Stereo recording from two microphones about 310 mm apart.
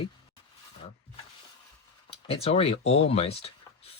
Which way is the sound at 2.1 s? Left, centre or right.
Centre.